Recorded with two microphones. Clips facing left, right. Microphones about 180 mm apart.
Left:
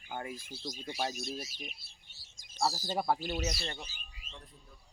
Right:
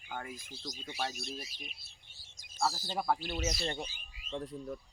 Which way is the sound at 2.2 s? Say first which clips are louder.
Left 1 dB; 35° left (ahead or behind).